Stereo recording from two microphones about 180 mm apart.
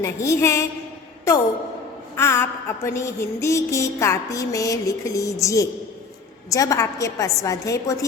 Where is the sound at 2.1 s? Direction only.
15° left (ahead or behind).